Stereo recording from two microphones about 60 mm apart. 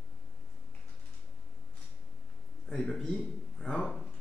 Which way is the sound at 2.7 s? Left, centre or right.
Centre.